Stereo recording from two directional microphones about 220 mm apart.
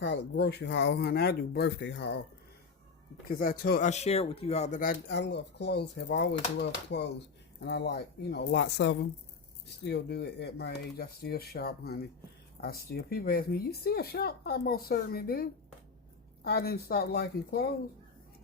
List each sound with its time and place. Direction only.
0.0 s speech: 55° left (ahead or behind)
3.2 s speech: 40° left (ahead or behind)